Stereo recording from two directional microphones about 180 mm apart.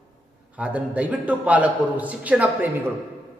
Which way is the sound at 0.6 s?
10° right (ahead or behind).